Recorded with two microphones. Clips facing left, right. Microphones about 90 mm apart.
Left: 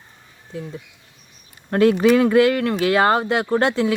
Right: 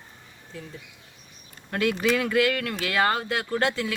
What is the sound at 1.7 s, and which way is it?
Speech, 35° left (ahead or behind).